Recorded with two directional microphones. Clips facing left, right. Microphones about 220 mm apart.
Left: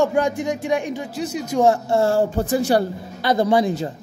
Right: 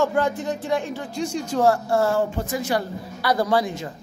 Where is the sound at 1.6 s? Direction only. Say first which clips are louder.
Left 2 dB; 20° left (ahead or behind).